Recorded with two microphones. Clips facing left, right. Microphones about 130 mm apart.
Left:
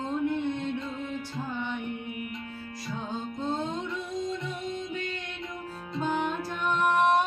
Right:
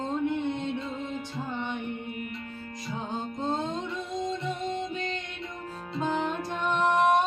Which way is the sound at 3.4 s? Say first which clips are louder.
Right 1 dB; 20° right (ahead or behind).